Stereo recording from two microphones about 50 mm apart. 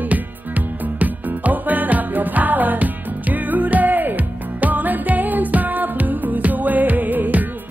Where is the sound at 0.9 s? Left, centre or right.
Right.